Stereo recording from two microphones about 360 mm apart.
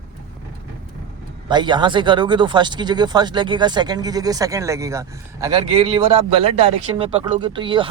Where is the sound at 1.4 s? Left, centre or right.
Centre.